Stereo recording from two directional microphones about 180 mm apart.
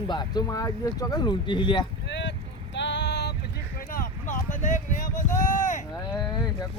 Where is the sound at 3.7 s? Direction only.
50° left (ahead or behind).